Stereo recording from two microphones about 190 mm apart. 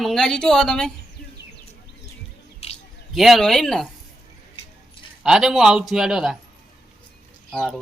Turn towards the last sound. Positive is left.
turn(degrees=0)  # may be behind; listen again after turning